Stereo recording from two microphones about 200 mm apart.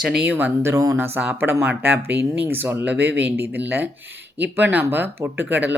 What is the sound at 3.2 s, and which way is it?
Speech, 10° right (ahead or behind).